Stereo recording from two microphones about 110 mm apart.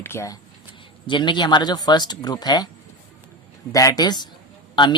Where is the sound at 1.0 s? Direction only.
45° left (ahead or behind).